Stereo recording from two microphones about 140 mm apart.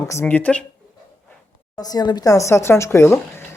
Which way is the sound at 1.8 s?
30° left (ahead or behind).